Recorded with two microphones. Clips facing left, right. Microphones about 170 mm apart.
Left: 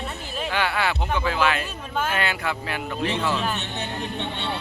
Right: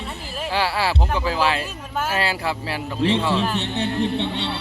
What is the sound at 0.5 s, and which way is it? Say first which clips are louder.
Speech: right 3 dB; 30° right (ahead or behind).